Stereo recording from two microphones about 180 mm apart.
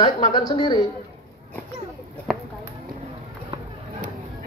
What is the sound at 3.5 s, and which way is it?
Run, 25° right (ahead or behind).